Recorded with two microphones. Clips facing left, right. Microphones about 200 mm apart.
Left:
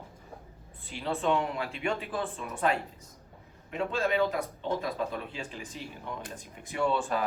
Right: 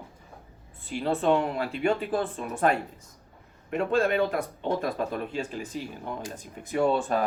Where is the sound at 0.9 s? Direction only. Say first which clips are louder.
Right 5 dB; 45° right (ahead or behind).